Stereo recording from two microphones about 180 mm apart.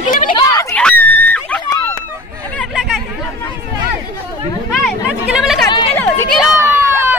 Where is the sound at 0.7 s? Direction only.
5° left (ahead or behind).